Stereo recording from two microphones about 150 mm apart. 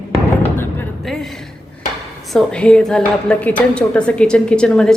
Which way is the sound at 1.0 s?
Centre (ahead or behind).